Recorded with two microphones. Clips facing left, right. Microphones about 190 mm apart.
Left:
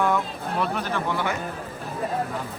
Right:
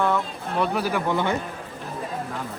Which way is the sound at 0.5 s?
Centre (ahead or behind).